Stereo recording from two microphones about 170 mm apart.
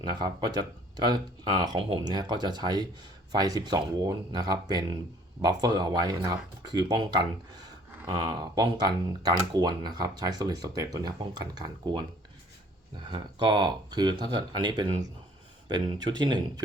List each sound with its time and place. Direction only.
0.0 s speech: 25° right (ahead or behind)
13.1 s speech: 25° right (ahead or behind)